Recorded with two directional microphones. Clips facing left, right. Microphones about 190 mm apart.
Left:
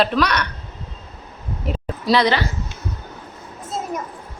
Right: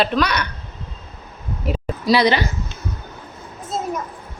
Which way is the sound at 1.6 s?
5° right (ahead or behind).